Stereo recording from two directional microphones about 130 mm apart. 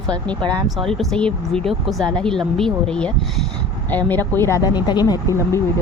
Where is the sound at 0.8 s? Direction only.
5° left (ahead or behind).